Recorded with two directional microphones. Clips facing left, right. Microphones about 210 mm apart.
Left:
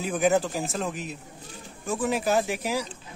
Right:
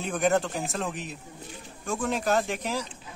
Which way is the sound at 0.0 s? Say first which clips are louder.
Left 2 dB; 5° left (ahead or behind).